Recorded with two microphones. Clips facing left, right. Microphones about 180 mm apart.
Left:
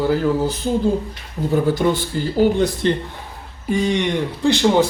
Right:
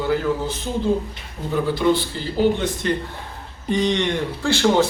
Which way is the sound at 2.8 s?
30° left (ahead or behind).